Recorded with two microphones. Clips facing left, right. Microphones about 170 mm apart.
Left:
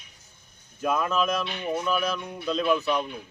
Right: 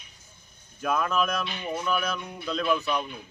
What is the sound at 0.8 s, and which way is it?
Speech, 5° left (ahead or behind).